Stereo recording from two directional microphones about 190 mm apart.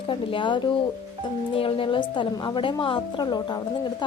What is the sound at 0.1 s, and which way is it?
A woman's voice, 25° left (ahead or behind).